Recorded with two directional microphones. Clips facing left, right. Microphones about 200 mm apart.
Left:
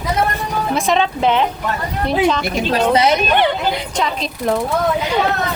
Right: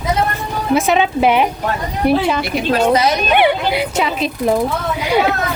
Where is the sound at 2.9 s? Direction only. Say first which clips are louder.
Left 1 dB; 25° left (ahead or behind).